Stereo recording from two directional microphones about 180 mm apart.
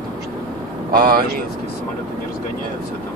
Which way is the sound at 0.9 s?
55° right (ahead or behind).